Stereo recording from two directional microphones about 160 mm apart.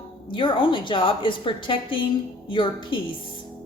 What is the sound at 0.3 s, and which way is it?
A woman's voice, 30° left (ahead or behind).